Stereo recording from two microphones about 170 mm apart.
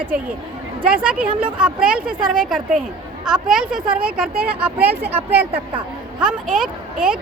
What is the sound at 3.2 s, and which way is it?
Speech, 5° right (ahead or behind).